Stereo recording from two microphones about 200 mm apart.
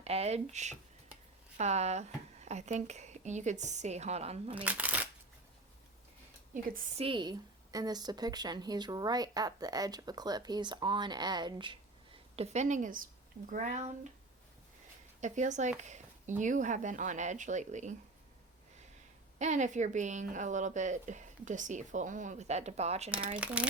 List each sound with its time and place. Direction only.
0.0 s a woman's voice: 30° right (ahead or behind)
4.5 s speech: 5° right (ahead or behind)
6.5 s a woman's voice: 40° right (ahead or behind)
7.0 s speech: 25° right (ahead or behind)
12.4 s a woman's voice: 35° right (ahead or behind)
15.2 s a woman's voice: 35° right (ahead or behind)
15.8 s a sound: 35° right (ahead or behind)
16.4 s a woman's voice: 40° right (ahead or behind)
19.4 s a woman's voice: 35° right (ahead or behind)
23.4 s speech: 5° right (ahead or behind)